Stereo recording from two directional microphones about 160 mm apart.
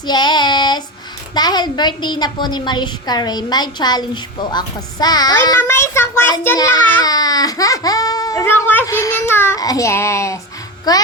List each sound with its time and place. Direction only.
0.1 s child singing: 25° left (ahead or behind)
1.3 s a woman's voice: 25° left (ahead or behind)
7.0 s a woman's voice: 25° left (ahead or behind)